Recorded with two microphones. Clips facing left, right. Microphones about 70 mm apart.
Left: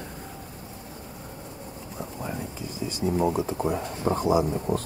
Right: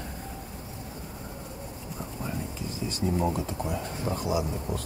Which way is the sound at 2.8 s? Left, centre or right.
Centre.